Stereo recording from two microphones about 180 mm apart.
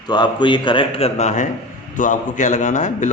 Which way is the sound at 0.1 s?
25° left (ahead or behind).